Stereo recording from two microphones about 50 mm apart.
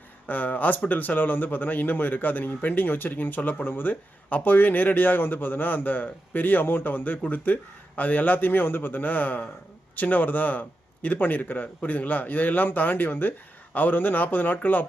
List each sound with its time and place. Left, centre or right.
0.3 s a man's voice: left